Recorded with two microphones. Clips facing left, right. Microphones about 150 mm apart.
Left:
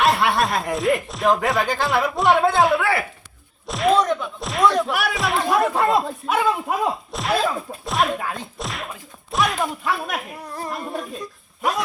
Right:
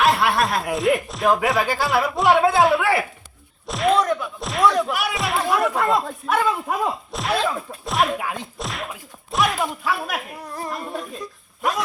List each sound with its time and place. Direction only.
0.0 s chuckle: centre (ahead or behind)
1.0 s speech: centre (ahead or behind)
3.7 s a sound: centre (ahead or behind)
5.7 s speech: 25° left (ahead or behind)
6.2 s speech: 5° left (ahead or behind)
8.2 s a sound: 15° right (ahead or behind)
8.5 s speech: centre (ahead or behind)